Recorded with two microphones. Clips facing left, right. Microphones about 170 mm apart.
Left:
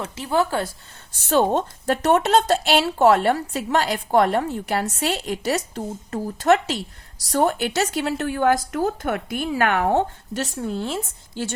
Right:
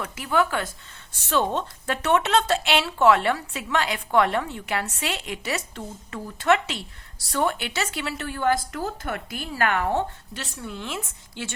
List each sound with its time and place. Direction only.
0.0 s speech: 30° left (ahead or behind)
1.1 s speech: 45° left (ahead or behind)